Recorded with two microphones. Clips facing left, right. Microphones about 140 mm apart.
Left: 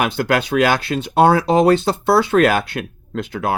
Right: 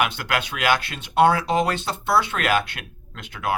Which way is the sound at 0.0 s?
40° left (ahead or behind).